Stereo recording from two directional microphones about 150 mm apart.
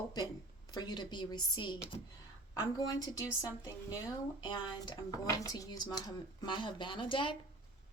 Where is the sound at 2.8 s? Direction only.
25° left (ahead or behind).